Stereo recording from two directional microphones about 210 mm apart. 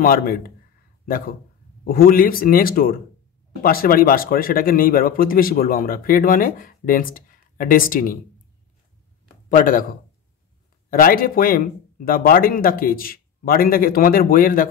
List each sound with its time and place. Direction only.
0.0 s speech: 45° left (ahead or behind)
9.5 s speech: 40° left (ahead or behind)
10.9 s speech: 45° left (ahead or behind)